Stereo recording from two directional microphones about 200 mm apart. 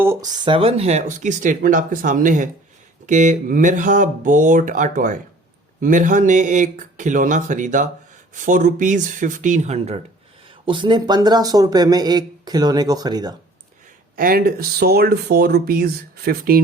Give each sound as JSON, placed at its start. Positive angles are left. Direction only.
{"t": 0.0, "sound": "speech", "side_deg": -15}
{"t": 0.4, "sound": "speech", "side_deg": -25}
{"t": 14.2, "sound": "speech", "side_deg": -45}